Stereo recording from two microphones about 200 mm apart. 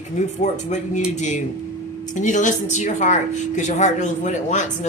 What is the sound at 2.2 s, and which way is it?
Speech, 40° left (ahead or behind).